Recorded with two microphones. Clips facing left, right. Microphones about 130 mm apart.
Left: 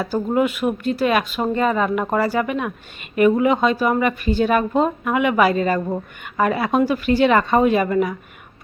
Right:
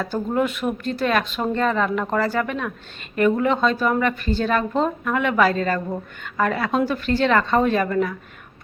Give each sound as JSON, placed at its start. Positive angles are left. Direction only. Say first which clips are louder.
{"t": 0.0, "sound": "speech", "louder": "left 3 dB", "side_deg": 5}